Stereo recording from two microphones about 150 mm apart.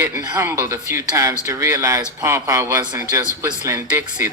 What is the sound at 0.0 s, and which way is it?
Speech, 15° right (ahead or behind).